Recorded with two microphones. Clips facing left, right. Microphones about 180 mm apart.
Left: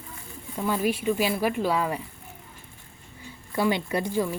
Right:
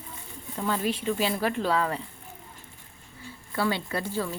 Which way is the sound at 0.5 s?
10° left (ahead or behind).